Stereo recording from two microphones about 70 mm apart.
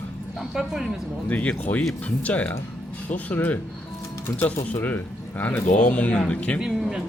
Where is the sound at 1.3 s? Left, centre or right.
Left.